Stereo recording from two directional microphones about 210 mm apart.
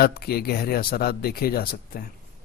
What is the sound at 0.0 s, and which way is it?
Speech, 45° left (ahead or behind).